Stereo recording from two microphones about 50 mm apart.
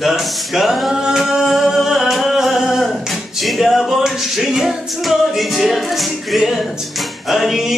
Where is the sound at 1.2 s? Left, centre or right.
Centre.